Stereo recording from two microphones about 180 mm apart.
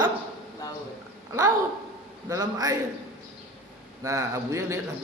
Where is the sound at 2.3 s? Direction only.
20° right (ahead or behind).